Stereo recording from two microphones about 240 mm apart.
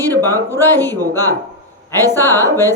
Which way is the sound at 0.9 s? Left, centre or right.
Centre.